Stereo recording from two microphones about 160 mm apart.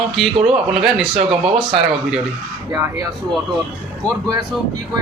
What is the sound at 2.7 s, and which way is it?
Speech, 15° right (ahead or behind).